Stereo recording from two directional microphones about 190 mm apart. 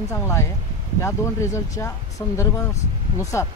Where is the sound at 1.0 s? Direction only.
15° left (ahead or behind).